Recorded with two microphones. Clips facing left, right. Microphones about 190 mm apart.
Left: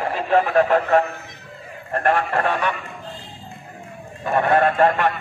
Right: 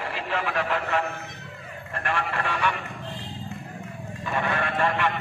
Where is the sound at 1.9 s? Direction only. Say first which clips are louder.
Left 9 dB; 50° left (ahead or behind).